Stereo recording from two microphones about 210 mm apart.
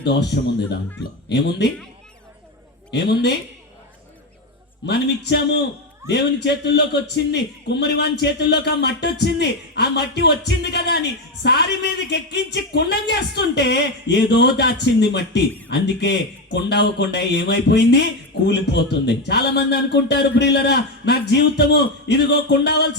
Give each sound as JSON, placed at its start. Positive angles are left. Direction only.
{"t": 0.3, "sound": "a man's voice", "side_deg": 55}
{"t": 2.9, "sound": "a man's voice", "side_deg": 50}
{"t": 5.3, "sound": "a man's voice", "side_deg": 55}